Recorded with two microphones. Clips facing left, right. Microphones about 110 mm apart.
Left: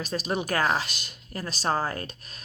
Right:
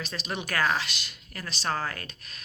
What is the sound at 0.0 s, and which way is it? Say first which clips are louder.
Speech: left 6 dB; 40° left (ahead or behind).